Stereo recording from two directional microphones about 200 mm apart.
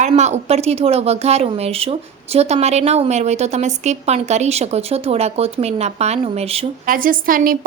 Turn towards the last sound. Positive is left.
turn(degrees=-45)  # may be behind; listen again after turning